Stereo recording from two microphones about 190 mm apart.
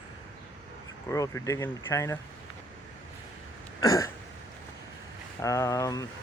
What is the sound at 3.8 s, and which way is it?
Speech, 15° left (ahead or behind).